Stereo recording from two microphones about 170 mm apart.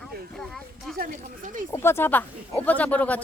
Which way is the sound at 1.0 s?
50° right (ahead or behind).